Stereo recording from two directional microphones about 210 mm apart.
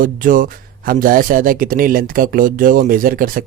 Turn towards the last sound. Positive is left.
turn(degrees=-40)  # may be behind; listen again after turning